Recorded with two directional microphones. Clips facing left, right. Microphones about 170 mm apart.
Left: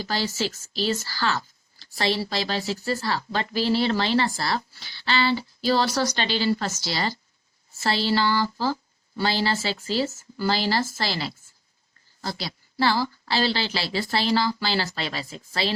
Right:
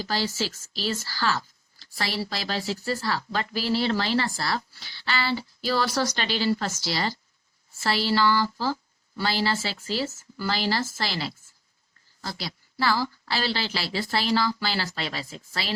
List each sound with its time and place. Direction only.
0.1 s a woman's voice: 25° left (ahead or behind)